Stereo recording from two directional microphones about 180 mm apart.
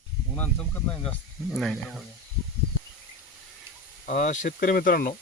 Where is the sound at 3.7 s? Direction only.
15° right (ahead or behind).